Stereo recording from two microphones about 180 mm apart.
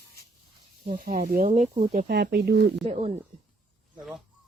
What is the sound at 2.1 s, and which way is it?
Speech, 60° right (ahead or behind).